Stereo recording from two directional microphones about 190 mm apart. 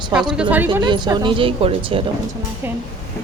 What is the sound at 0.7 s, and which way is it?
Speech, 25° right (ahead or behind).